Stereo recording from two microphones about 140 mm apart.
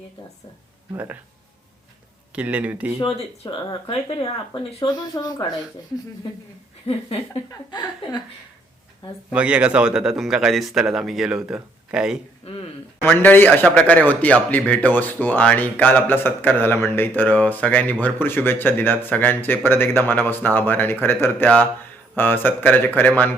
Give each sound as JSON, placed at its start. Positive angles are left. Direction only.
{"t": 2.3, "sound": "speech", "side_deg": -10}
{"t": 3.5, "sound": "speech", "side_deg": 40}
{"t": 4.8, "sound": "speech", "side_deg": 30}
{"t": 7.7, "sound": "speech", "side_deg": 30}
{"t": 9.3, "sound": "a man's voice", "side_deg": -10}
{"t": 13.0, "sound": "speech", "side_deg": 15}